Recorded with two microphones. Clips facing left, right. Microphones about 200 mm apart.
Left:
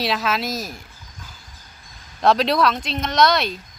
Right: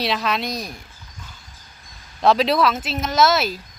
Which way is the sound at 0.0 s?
Centre (ahead or behind).